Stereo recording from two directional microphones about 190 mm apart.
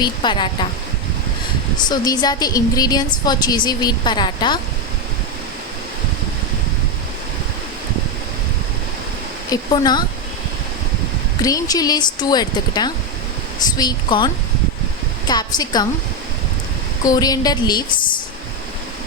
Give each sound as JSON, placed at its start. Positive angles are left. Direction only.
{"t": 0.0, "sound": "a woman's voice", "side_deg": 25}
{"t": 1.9, "sound": "a woman's voice", "side_deg": 20}
{"t": 9.5, "sound": "a woman's voice", "side_deg": 20}
{"t": 11.4, "sound": "a woman's voice", "side_deg": 20}
{"t": 15.3, "sound": "a woman's voice", "side_deg": 20}
{"t": 17.0, "sound": "a woman's voice", "side_deg": 20}